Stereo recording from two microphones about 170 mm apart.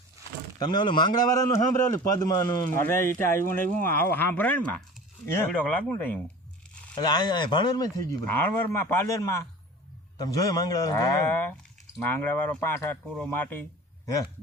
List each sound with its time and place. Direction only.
0.6 s a man's voice: 25° left (ahead or behind)
6.9 s speech: 25° left (ahead or behind)
8.3 s a man's voice: 10° left (ahead or behind)